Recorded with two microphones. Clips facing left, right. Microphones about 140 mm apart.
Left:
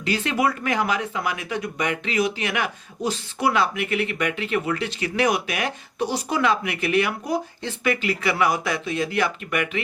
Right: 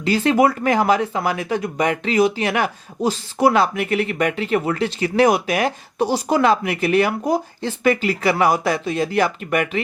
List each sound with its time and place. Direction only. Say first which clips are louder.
0.0 s speech: right 7 dB; 35° right (ahead or behind)